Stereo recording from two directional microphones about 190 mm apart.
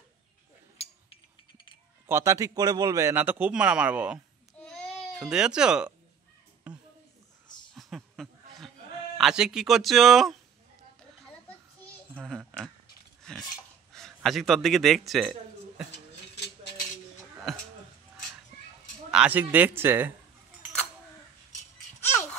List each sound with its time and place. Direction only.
2.0 s a man's voice: 15° right (ahead or behind)
4.6 s babbling: 5° left (ahead or behind)
5.2 s speech: 5° right (ahead or behind)
6.7 s a sound: 5° right (ahead or behind)
7.7 s chuckle: centre (ahead or behind)
9.2 s speech: 5° right (ahead or behind)
12.2 s a sound: centre (ahead or behind)
13.9 s a man's voice: centre (ahead or behind)
15.9 s cutlery: 65° left (ahead or behind)
17.5 s speech: centre (ahead or behind)
19.0 s a man's voice: 5° right (ahead or behind)